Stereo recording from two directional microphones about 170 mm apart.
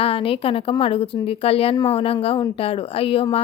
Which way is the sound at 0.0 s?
35° left (ahead or behind).